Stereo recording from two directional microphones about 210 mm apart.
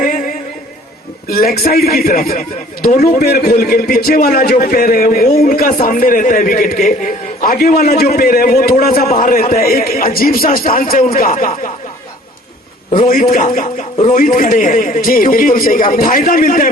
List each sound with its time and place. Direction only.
0.0 s a sound: 40° left (ahead or behind)
1.3 s a man's voice: 45° left (ahead or behind)
13.1 s a man's voice: 40° left (ahead or behind)